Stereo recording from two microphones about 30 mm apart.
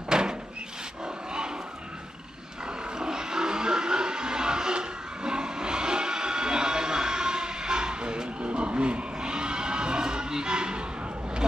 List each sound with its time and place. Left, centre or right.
0.1 s door: right
1.0 s dog: right
3.0 s music: right
8.5 s a sound: right